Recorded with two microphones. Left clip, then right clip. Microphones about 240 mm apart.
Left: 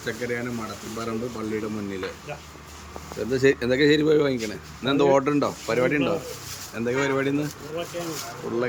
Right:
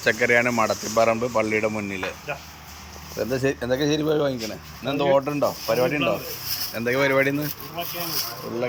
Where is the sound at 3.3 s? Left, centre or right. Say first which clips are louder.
Left 4 dB; centre.